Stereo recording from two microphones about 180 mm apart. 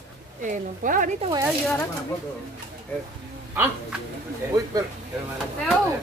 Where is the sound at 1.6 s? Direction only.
10° left (ahead or behind).